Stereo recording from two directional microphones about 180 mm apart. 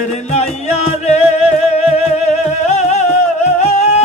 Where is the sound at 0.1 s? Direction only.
40° left (ahead or behind).